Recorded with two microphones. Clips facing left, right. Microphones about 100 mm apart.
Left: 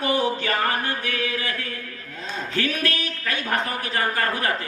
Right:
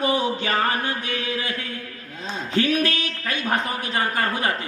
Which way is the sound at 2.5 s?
20° right (ahead or behind).